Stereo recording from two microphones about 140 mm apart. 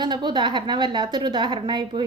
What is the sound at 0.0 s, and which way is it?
Speech, 30° right (ahead or behind).